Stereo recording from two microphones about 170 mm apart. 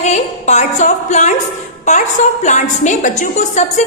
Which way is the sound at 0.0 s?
40° left (ahead or behind).